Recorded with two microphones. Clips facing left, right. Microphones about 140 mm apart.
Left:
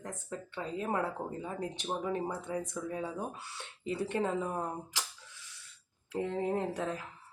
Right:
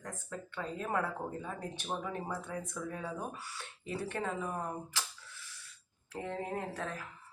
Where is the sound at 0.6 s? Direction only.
20° left (ahead or behind).